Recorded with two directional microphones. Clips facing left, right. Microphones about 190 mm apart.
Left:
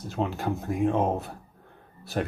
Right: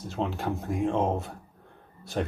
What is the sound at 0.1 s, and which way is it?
Speech, centre (ahead or behind).